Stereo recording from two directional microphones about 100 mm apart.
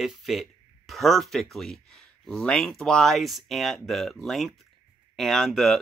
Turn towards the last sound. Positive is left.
turn(degrees=5)  # may be behind; listen again after turning